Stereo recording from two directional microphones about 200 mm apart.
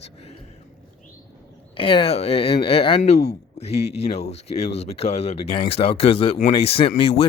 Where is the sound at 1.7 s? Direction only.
25° left (ahead or behind).